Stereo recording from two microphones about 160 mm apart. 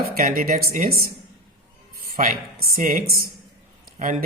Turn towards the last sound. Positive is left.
turn(degrees=-50)  # may be behind; listen again after turning